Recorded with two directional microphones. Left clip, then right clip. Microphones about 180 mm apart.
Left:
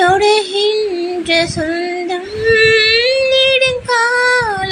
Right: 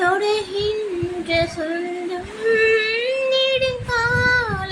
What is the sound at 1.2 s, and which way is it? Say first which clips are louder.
Female singing: left 6 dB; 20° left (ahead or behind).